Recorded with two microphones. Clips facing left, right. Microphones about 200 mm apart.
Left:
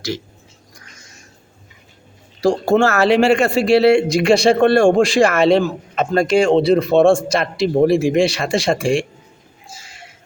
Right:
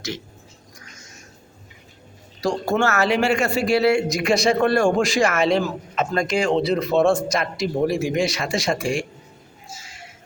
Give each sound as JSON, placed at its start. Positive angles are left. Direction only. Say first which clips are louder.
{"t": 2.4, "sound": "a man's voice", "louder": "left 6 dB", "side_deg": 30}